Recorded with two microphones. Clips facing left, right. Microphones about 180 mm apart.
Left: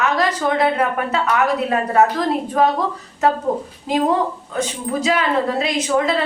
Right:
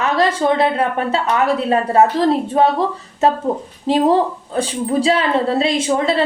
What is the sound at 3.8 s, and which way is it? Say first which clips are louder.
A woman's voice: right 4 dB; 30° right (ahead or behind).